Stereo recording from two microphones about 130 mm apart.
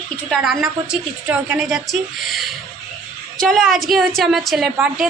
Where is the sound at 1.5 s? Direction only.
Centre (ahead or behind).